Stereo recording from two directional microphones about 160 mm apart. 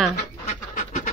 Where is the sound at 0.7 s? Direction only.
50° left (ahead or behind).